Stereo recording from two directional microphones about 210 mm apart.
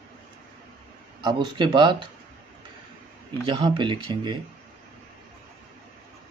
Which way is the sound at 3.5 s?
25° right (ahead or behind).